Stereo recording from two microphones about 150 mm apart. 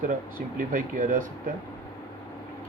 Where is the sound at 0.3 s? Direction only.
60° right (ahead or behind).